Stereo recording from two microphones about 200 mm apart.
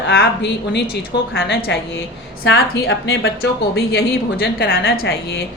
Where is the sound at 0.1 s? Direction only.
55° left (ahead or behind).